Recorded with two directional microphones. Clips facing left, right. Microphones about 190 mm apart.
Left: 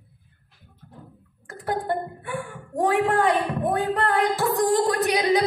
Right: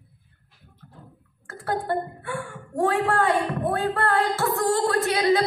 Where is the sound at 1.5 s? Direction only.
15° left (ahead or behind).